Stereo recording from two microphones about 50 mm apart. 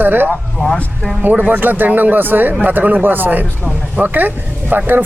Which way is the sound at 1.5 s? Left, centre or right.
Right.